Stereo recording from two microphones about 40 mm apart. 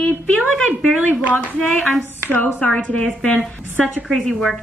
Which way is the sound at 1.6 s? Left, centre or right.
Left.